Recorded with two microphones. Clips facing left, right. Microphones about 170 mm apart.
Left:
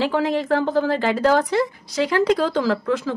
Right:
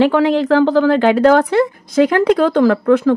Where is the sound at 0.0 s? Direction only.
75° right (ahead or behind).